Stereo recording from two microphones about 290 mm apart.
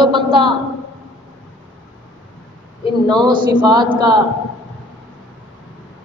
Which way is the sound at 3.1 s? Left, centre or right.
Centre.